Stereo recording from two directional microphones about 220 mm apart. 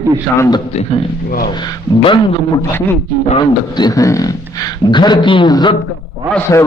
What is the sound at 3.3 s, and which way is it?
A man's voice, 20° left (ahead or behind).